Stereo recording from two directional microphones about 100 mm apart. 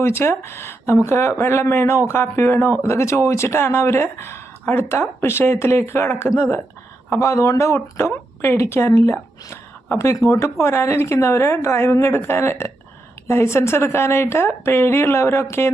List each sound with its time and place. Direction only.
0.0 s speech: 25° left (ahead or behind)